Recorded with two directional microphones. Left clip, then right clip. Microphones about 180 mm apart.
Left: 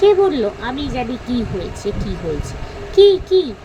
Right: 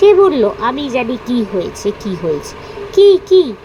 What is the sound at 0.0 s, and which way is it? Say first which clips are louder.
Speech: right 5 dB; 20° right (ahead or behind).